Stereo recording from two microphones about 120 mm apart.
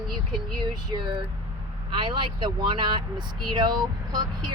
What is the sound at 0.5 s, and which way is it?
Speech, 40° right (ahead or behind).